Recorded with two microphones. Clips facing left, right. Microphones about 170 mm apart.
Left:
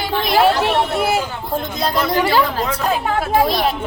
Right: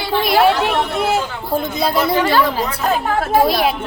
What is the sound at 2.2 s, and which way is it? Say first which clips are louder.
Speech: left 1 dB; 10° left (ahead or behind).